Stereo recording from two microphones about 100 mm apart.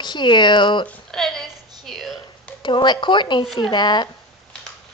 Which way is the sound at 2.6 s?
50° left (ahead or behind).